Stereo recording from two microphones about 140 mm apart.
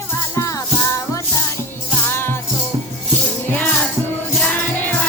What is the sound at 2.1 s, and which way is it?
Music, 15° left (ahead or behind).